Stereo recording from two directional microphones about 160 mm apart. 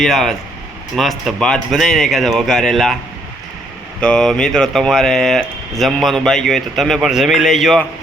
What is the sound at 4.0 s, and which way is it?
Speech, 5° left (ahead or behind).